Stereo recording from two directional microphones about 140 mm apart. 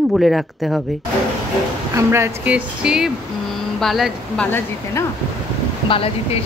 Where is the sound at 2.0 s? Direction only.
20° right (ahead or behind); by 4.5 s centre (ahead or behind).